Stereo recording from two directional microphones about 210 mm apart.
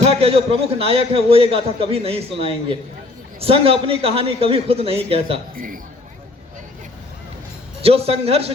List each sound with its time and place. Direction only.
0.0 s a man's voice: 30° right (ahead or behind)
5.5 s a man's voice: 40° right (ahead or behind)
7.8 s a man's voice: 30° right (ahead or behind)